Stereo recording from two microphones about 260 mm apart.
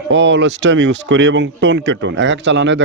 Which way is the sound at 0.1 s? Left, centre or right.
Right.